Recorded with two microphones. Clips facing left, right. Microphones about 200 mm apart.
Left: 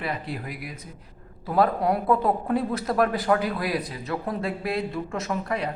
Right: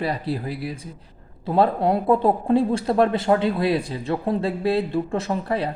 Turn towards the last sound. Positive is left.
turn(degrees=-30)  # may be behind; listen again after turning